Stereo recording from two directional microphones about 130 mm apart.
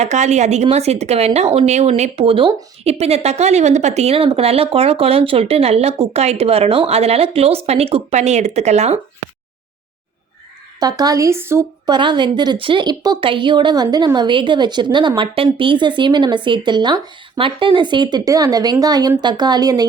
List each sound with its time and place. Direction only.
0.0 s speech: 60° right (ahead or behind); by 2.5 s 45° right (ahead or behind)
2.8 s speech: 55° right (ahead or behind)
10.8 s speech: 30° right (ahead or behind)
11.9 s a woman's voice: 35° right (ahead or behind)